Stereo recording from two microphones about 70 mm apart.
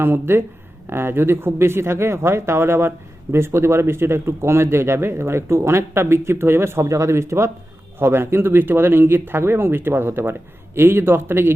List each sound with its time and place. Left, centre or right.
0.0 s speech: right